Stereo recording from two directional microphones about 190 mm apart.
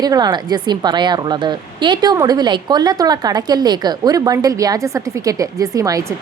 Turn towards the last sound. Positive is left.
turn(degrees=-20)  # may be behind; listen again after turning